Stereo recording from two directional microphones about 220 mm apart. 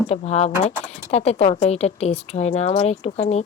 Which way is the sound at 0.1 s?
30° left (ahead or behind).